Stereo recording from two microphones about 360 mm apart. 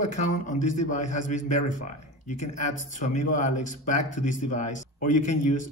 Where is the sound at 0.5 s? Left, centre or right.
Centre.